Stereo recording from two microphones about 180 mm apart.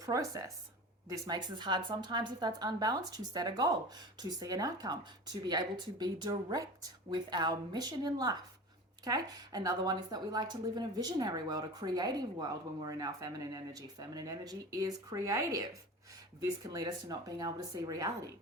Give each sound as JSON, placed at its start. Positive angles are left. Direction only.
{"t": 0.0, "sound": "a woman's voice", "side_deg": -20}